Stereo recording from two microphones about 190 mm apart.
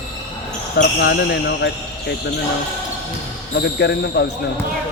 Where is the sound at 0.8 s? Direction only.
60° left (ahead or behind).